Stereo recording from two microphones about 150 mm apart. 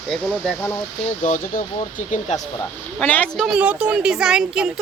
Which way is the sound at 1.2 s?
60° left (ahead or behind).